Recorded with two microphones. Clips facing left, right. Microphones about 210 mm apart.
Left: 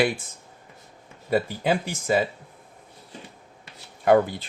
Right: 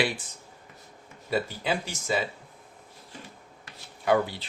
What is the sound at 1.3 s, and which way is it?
Speech, 55° left (ahead or behind).